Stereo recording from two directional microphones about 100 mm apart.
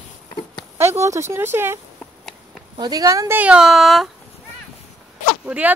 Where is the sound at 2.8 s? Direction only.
40° right (ahead or behind).